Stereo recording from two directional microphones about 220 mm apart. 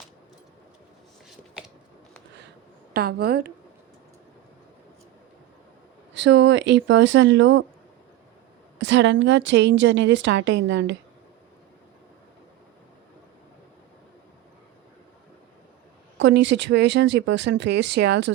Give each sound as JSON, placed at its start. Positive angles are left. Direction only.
{"t": 2.9, "sound": "speech", "side_deg": -45}
{"t": 6.1, "sound": "a woman's voice", "side_deg": -55}
{"t": 8.8, "sound": "a woman's voice", "side_deg": -55}
{"t": 16.1, "sound": "speech", "side_deg": -55}